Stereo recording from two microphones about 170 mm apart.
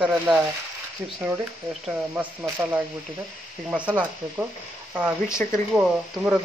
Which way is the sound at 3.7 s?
10° right (ahead or behind).